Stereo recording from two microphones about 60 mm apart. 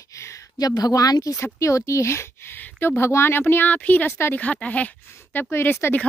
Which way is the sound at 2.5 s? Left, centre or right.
Left.